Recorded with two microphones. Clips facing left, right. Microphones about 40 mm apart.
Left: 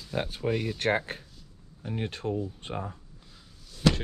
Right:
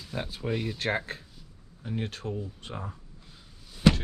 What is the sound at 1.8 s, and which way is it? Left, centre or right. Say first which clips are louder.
Speech: even; left.